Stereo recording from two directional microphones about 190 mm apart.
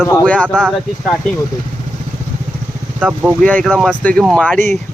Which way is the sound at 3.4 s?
5° left (ahead or behind).